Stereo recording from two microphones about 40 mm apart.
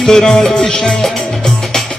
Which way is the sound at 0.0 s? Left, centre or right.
Centre.